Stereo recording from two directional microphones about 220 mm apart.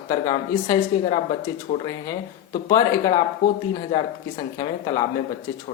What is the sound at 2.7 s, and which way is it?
Speech, 15° left (ahead or behind).